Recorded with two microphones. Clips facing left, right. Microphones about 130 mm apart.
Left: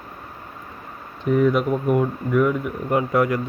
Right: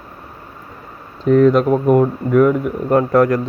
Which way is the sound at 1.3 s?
90° right.